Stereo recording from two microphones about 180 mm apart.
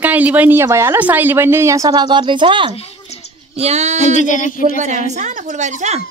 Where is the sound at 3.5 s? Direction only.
35° right (ahead or behind).